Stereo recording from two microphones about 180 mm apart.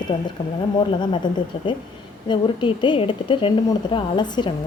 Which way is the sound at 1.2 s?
25° left (ahead or behind).